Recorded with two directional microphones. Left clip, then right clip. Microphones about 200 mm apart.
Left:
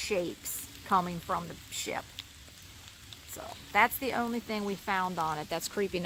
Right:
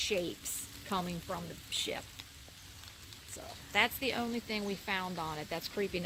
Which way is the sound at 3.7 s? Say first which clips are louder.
Left 4 dB; 20° left (ahead or behind).